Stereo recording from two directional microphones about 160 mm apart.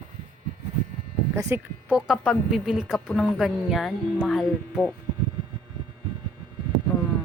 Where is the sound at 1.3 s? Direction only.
15° right (ahead or behind).